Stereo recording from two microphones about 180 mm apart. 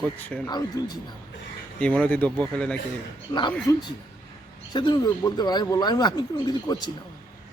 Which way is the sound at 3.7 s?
20° left (ahead or behind).